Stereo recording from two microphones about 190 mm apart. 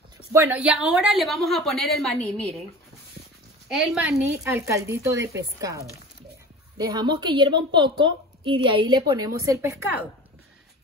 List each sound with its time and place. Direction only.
0.3 s a woman's voice: 10° right (ahead or behind); by 2.6 s 5° left (ahead or behind)
3.6 s a woman's voice: 5° right (ahead or behind)
4.4 s a woman's voice: 15° right (ahead or behind)